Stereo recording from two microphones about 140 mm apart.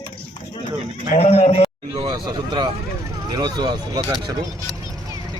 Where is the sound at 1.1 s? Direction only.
50° left (ahead or behind).